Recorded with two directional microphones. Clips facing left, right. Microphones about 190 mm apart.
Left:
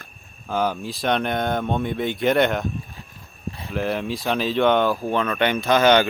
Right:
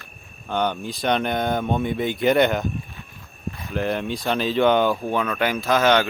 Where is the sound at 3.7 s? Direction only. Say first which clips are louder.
Even; centre (ahead or behind).